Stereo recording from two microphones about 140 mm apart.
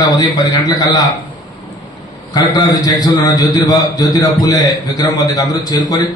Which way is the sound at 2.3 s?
25° left (ahead or behind).